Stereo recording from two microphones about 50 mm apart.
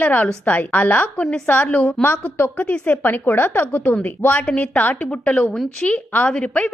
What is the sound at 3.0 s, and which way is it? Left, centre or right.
A woman's voice, left.